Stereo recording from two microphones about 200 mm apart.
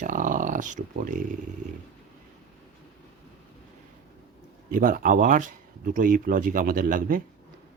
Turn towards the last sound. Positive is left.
turn(degrees=-45)  # may be behind; listen again after turning